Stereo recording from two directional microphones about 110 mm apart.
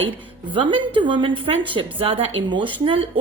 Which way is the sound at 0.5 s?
50° right (ahead or behind).